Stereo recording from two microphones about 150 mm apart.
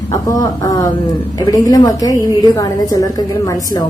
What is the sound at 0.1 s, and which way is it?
A woman's voice, 25° left (ahead or behind).